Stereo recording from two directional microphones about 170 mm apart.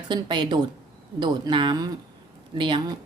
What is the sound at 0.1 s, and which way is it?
A woman's voice, 25° right (ahead or behind).